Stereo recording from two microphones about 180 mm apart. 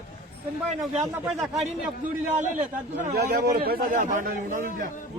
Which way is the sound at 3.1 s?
60° right (ahead or behind).